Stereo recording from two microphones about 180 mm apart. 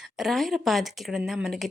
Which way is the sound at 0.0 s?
Centre (ahead or behind).